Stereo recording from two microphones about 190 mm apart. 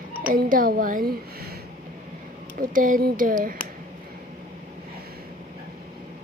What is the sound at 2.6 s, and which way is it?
A child's voice, 45° right (ahead or behind).